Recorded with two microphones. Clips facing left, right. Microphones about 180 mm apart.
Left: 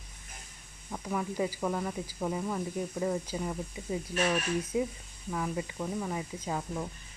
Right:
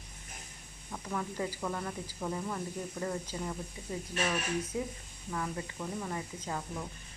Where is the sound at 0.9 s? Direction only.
10° left (ahead or behind).